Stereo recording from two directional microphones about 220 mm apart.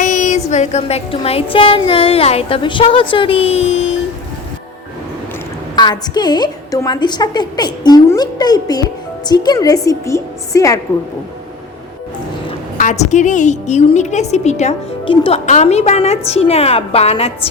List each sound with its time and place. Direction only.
0.0 s music: 35° left (ahead or behind)
5.7 s music: 20° left (ahead or behind)
9.3 s a woman's voice: 20° left (ahead or behind)
12.7 s a woman's voice: 35° left (ahead or behind)